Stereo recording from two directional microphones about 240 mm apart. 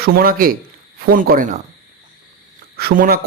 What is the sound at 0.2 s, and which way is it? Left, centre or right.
A man's voice, right.